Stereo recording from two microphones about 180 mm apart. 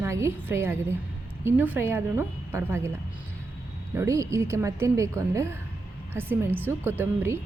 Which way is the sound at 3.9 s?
15° right (ahead or behind).